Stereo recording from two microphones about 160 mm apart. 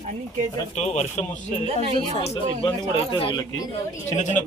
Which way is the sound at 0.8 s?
45° left (ahead or behind).